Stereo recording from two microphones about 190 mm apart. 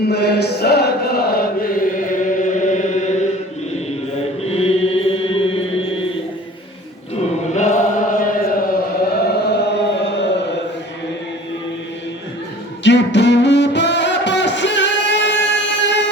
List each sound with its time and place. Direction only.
0.0 s chant: 60° left (ahead or behind); by 2.9 s 40° left (ahead or behind)
4.4 s chant: 30° left (ahead or behind)
7.5 s chant: 40° left (ahead or behind)
9.0 s chant: 55° left (ahead or behind)
12.8 s music: 65° left (ahead or behind)